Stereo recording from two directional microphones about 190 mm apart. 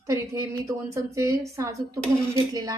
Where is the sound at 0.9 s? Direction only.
15° right (ahead or behind).